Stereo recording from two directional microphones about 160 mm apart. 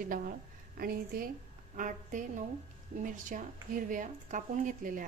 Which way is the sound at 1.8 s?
55° right (ahead or behind).